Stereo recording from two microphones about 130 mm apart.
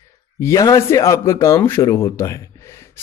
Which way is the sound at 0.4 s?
25° left (ahead or behind).